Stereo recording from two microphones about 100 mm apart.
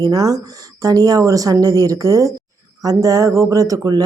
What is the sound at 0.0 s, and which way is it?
Speech, 40° right (ahead or behind).